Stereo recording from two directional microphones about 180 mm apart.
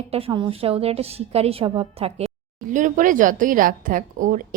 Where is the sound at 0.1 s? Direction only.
30° right (ahead or behind).